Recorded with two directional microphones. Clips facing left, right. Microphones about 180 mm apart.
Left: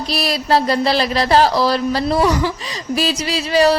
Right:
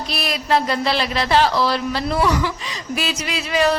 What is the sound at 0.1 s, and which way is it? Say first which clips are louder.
A woman's voice: left 3 dB; 35° left (ahead or behind).